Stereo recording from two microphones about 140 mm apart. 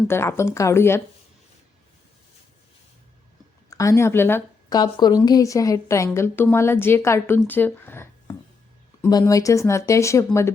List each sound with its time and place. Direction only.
0.1 s speech: 20° left (ahead or behind)
3.7 s speech: 20° left (ahead or behind)
4.7 s a woman's voice: 30° left (ahead or behind)
9.0 s a woman's voice: 25° left (ahead or behind)